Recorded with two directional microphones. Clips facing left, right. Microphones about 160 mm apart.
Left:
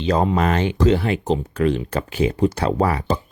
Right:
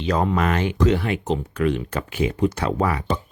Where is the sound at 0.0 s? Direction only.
30° left (ahead or behind).